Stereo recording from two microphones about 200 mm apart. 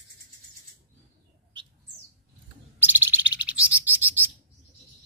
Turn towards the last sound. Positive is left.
turn(degrees=-10)  # may be behind; listen again after turning